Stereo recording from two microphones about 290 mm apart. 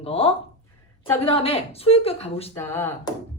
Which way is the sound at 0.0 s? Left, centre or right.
Centre.